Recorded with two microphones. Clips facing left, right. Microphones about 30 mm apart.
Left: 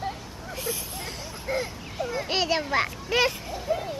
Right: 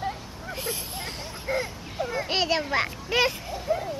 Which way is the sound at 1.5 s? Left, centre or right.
Centre.